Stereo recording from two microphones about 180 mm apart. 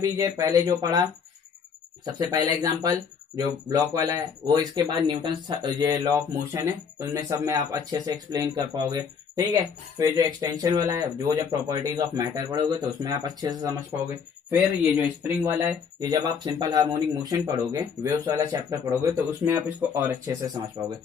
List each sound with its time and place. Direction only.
0.0 s speech: 20° right (ahead or behind)
2.1 s speech: 20° right (ahead or behind)
15.4 s speech: 15° right (ahead or behind)